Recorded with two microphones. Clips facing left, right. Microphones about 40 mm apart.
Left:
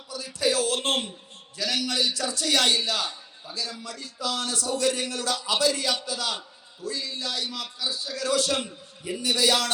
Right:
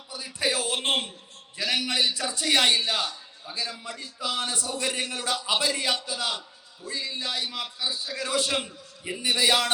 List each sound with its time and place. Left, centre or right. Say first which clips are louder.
0.1 s music: left 2 dB; right